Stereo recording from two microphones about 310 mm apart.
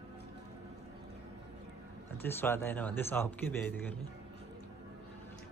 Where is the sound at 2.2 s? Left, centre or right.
Centre.